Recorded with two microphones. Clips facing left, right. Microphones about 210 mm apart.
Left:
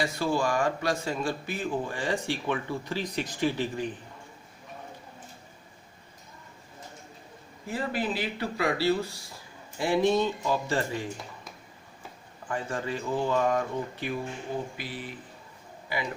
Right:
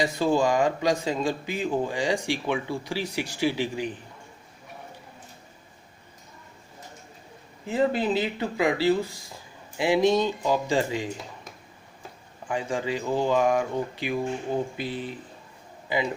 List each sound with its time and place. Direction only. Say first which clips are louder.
0.0 s speech: right 5 dB; 20° right (ahead or behind)
7.7 s speech: right 7 dB; 25° right (ahead or behind)
12.5 s speech: right 4 dB; 15° right (ahead or behind)
14.8 s speech: right 6 dB; 25° right (ahead or behind)